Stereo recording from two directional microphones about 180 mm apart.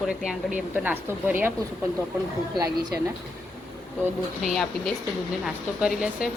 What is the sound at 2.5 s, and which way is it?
Speech, 20° right (ahead or behind).